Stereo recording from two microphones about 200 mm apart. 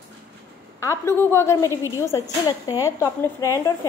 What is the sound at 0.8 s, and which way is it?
Speech, 15° left (ahead or behind).